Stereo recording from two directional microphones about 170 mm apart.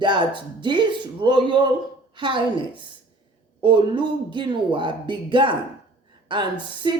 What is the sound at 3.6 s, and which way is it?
A woman's voice, 30° right (ahead or behind).